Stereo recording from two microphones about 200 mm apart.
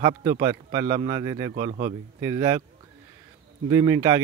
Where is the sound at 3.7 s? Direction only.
20° right (ahead or behind).